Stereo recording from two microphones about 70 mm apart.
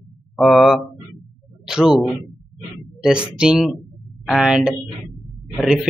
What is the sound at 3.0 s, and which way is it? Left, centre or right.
Speech, centre.